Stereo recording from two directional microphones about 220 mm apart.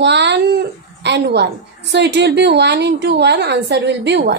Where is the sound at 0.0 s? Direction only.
50° right (ahead or behind).